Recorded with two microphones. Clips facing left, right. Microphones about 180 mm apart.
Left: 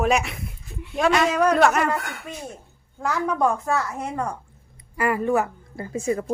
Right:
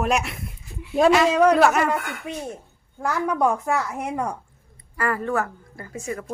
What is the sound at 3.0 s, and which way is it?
A woman's voice, 10° right (ahead or behind).